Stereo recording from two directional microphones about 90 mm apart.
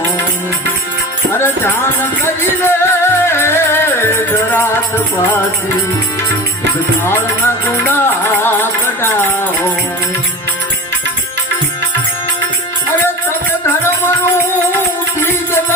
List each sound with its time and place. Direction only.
1.3 s music: 30° left (ahead or behind)
7.1 s music: 25° left (ahead or behind)
9.0 s a sound: 25° left (ahead or behind)